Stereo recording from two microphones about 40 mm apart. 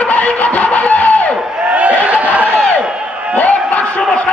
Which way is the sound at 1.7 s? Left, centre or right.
Right.